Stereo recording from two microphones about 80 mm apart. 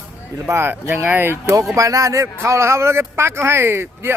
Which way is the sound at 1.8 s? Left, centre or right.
Right.